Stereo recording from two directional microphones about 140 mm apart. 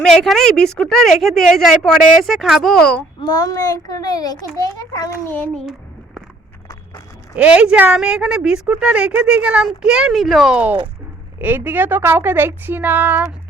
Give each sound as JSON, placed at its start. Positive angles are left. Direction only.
{"t": 0.0, "sound": "a woman's voice", "side_deg": 5}
{"t": 3.2, "sound": "a child's voice", "side_deg": 25}
{"t": 5.3, "sound": "child singing", "side_deg": 10}
{"t": 7.3, "sound": "a woman's voice", "side_deg": -10}